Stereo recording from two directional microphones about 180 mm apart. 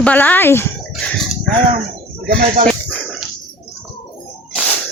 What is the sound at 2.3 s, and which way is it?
Speech, 50° right (ahead or behind).